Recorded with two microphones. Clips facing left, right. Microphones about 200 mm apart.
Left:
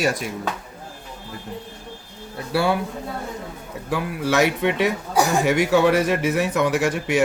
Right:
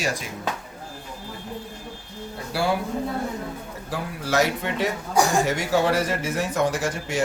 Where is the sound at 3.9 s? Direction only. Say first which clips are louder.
Left 4 dB; 65° left (ahead or behind).